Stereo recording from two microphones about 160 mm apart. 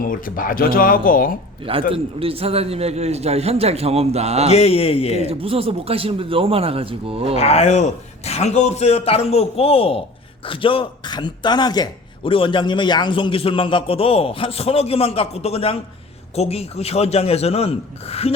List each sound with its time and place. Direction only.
0.0 s speech: 60° left (ahead or behind)
1.9 s speech: 35° right (ahead or behind)
4.5 s a man's voice: 40° left (ahead or behind)
5.2 s speech: 35° right (ahead or behind)
7.3 s a man's voice: 40° left (ahead or behind)